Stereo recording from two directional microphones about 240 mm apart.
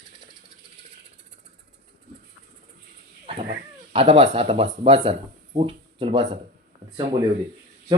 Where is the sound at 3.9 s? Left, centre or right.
Right.